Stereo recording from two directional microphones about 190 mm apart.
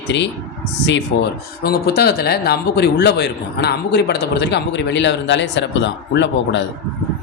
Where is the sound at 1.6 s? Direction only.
55° left (ahead or behind).